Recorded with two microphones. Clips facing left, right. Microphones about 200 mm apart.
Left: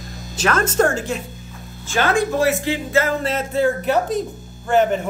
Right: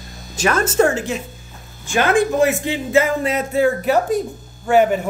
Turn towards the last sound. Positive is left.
turn(degrees=-10)  # may be behind; listen again after turning